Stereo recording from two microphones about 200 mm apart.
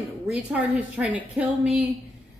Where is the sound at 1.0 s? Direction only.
5° right (ahead or behind).